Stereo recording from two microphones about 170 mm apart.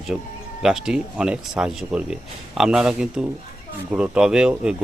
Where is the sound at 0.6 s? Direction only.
5° right (ahead or behind).